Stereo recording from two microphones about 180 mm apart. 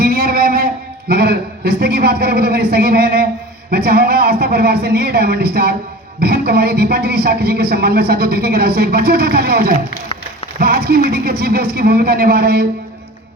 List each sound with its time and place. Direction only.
0.0 s a man's voice: 55° right (ahead or behind)